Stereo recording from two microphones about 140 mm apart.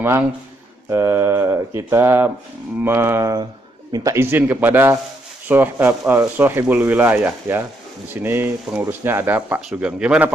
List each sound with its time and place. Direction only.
0.0 s speech: 15° right (ahead or behind)